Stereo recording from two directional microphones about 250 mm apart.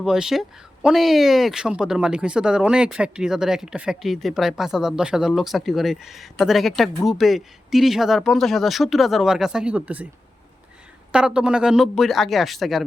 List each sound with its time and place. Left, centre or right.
0.0 s speech: centre
11.1 s speech: centre